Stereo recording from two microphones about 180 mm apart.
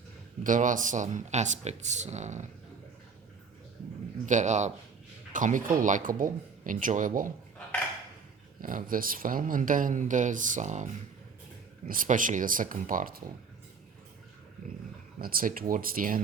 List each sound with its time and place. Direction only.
0.4 s speech: 45° right (ahead or behind)
4.3 s speech: 40° right (ahead or behind)
8.6 s speech: 50° right (ahead or behind)
15.2 s speech: 55° right (ahead or behind)